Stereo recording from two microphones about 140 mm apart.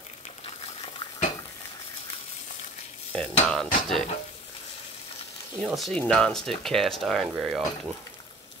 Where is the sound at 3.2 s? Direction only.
5° left (ahead or behind).